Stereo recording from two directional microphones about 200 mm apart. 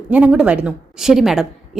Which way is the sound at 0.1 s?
5° right (ahead or behind).